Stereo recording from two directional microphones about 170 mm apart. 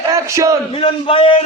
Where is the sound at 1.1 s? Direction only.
30° left (ahead or behind).